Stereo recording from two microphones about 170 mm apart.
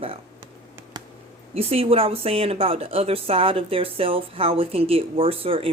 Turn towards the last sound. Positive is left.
turn(degrees=-35)  # may be behind; listen again after turning